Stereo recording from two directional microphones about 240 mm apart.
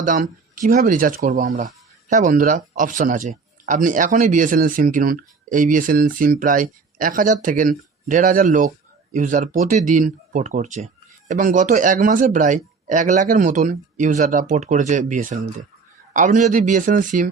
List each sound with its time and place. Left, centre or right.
0.0 s speech: right